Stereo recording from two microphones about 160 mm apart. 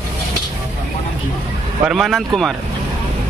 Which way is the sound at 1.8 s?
Centre (ahead or behind).